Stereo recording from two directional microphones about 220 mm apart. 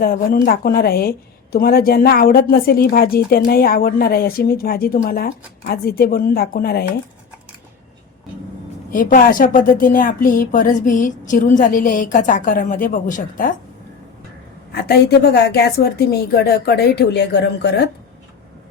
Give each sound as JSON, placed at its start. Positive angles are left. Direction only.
{"t": 0.0, "sound": "a woman's voice", "side_deg": 40}
{"t": 8.9, "sound": "a woman's voice", "side_deg": 40}
{"t": 14.8, "sound": "a woman's voice", "side_deg": 45}